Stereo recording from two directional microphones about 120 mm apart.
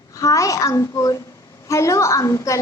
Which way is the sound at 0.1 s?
25° left (ahead or behind).